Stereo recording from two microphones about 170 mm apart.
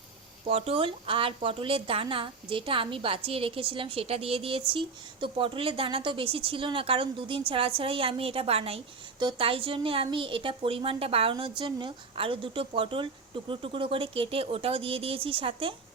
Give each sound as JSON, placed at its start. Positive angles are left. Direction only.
{"t": 0.4, "sound": "speech", "side_deg": -35}